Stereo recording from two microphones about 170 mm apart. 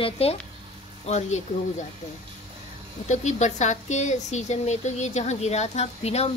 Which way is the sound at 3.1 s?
45° left (ahead or behind).